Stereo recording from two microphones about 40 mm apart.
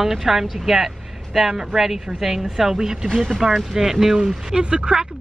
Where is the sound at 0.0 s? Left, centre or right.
Centre.